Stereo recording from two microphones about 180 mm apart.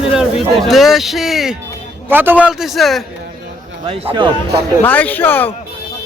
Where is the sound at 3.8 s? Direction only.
30° right (ahead or behind).